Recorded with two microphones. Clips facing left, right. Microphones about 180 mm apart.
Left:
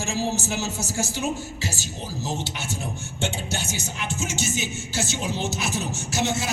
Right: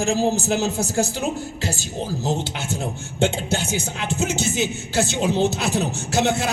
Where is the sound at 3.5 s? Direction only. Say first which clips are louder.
Right 6 dB; 55° right (ahead or behind).